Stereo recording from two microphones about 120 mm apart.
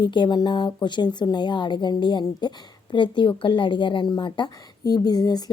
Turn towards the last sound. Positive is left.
turn(degrees=35)  # may be behind; listen again after turning